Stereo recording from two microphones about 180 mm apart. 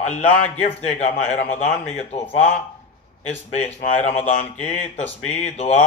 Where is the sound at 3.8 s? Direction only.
40° left (ahead or behind).